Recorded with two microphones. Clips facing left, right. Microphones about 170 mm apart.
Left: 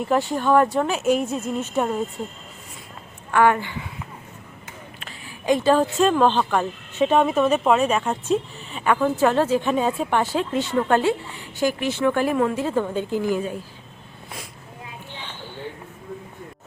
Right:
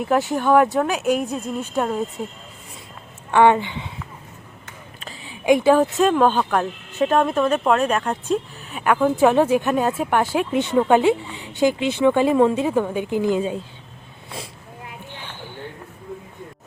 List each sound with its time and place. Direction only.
0.0 s speech: centre (ahead or behind)
3.3 s speech: 20° right (ahead or behind)
5.5 s speech: 10° right (ahead or behind)
12.6 s speech: 10° right (ahead or behind)
15.1 s a sound: 15° right (ahead or behind)